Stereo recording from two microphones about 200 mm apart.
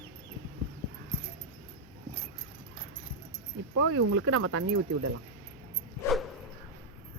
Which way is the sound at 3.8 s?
90° right.